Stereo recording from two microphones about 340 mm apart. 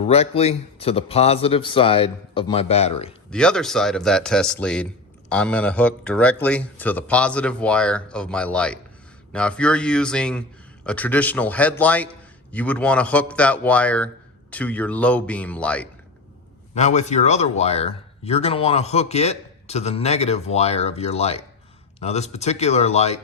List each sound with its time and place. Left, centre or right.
0.1 s a man's voice: centre
3.2 s speech: centre
16.7 s speech: left